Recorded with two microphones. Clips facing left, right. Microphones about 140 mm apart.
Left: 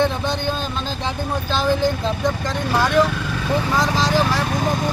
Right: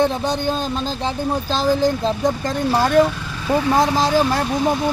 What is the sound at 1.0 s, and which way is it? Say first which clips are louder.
Speech: right 2 dB; 35° right (ahead or behind).